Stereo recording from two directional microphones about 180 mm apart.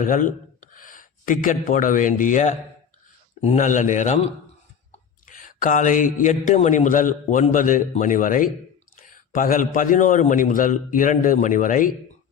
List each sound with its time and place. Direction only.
0.0 s speech: 50° left (ahead or behind)
5.2 s speech: 45° left (ahead or behind)